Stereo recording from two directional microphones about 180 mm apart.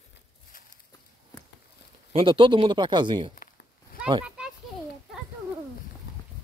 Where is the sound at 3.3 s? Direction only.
55° left (ahead or behind).